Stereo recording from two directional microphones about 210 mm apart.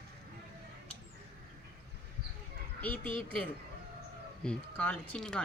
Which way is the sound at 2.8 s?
5° left (ahead or behind).